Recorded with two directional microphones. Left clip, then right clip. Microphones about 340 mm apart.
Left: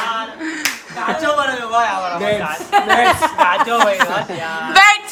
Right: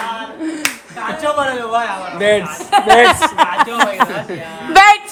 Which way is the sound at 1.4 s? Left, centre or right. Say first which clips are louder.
Left 1 dB; centre.